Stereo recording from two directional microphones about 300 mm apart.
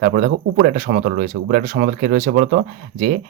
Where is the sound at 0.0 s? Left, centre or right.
Right.